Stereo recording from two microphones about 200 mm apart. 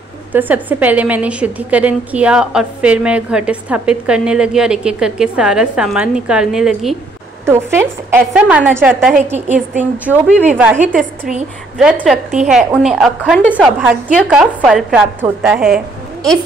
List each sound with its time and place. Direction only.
0.3 s a woman's voice: 10° right (ahead or behind)
9.1 s a woman's voice: 35° right (ahead or behind)
9.8 s a woman's voice: 5° right (ahead or behind)